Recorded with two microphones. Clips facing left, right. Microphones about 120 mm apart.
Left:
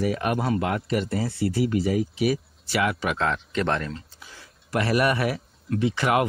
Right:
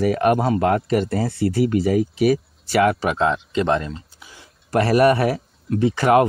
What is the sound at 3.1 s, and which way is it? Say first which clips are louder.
Speech: right 5 dB; 20° right (ahead or behind).